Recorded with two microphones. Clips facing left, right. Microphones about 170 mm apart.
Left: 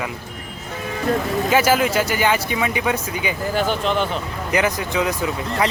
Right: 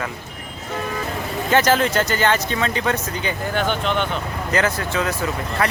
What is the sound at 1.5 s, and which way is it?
Speech, 10° left (ahead or behind).